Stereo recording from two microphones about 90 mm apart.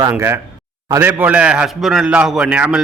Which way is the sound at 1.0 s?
15° right (ahead or behind).